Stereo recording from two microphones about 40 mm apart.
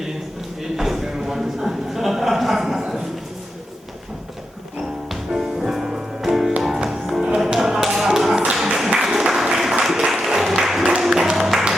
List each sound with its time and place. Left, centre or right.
0.8 s a sound: centre
5.3 s music: centre
7.4 s tap: centre
8.6 s music: centre
9.8 s a sound: centre
11.0 s music: centre